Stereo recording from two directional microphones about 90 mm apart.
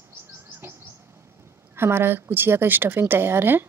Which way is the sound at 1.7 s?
25° right (ahead or behind).